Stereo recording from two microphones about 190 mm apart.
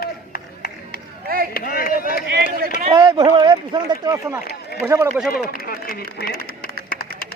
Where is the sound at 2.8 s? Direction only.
25° right (ahead or behind).